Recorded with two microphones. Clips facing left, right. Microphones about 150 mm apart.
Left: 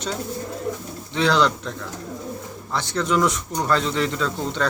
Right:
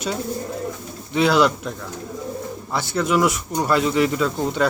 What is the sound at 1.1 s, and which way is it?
Speech, 10° right (ahead or behind).